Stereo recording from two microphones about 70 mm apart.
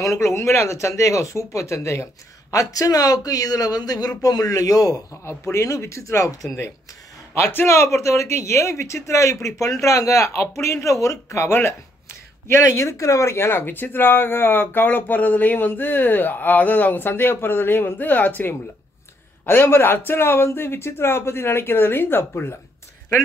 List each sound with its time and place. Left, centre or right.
0.0 s speech: left
2.5 s speech: left
5.4 s speech: left
7.3 s speech: left